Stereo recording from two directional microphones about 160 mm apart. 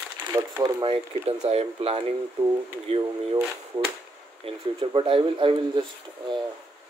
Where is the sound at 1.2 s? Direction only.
40° right (ahead or behind).